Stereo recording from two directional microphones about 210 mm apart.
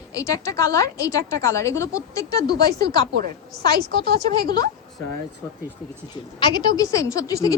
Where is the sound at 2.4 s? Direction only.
50° right (ahead or behind).